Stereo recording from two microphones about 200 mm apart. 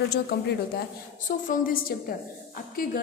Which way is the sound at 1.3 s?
40° left (ahead or behind).